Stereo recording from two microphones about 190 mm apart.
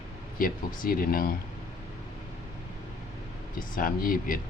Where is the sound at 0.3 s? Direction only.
50° left (ahead or behind).